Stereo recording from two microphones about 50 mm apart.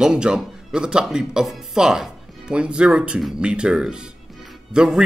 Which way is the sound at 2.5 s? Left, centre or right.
Right.